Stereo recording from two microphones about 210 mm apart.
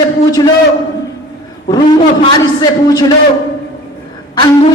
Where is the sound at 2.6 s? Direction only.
15° left (ahead or behind).